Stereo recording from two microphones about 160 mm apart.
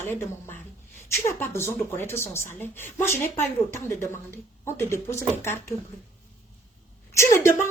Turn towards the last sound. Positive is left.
turn(degrees=20)  # may be behind; listen again after turning